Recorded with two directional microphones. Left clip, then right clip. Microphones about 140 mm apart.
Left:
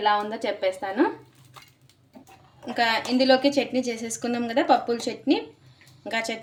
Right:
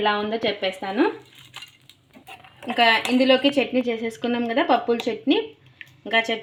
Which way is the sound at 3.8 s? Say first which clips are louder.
Right 4 dB; 15° right (ahead or behind).